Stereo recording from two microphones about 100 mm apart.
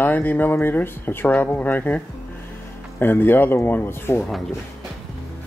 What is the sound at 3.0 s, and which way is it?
Speech, 20° left (ahead or behind).